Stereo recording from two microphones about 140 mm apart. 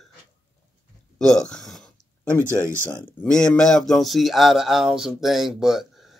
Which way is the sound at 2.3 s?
15° left (ahead or behind).